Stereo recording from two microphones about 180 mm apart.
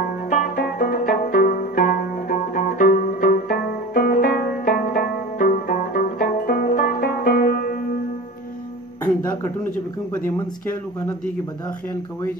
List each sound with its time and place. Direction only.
0.3 s music: 55° left (ahead or behind)
10.1 s speech: 15° left (ahead or behind)